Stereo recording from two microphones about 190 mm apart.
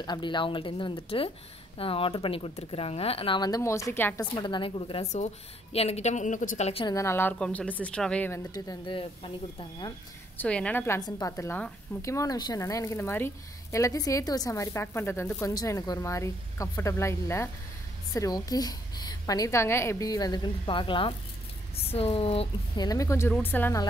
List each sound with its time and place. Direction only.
0.0 s speech: 25° left (ahead or behind)
7.0 s a woman's voice: 10° left (ahead or behind)
8.5 s speech: 20° left (ahead or behind)
10.3 s a woman's voice: 5° left (ahead or behind); by 22.8 s 30° left (ahead or behind)
22.8 s a woman's voice: 15° left (ahead or behind)